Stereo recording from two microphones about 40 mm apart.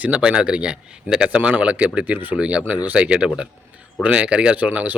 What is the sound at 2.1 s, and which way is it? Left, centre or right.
Speech, right.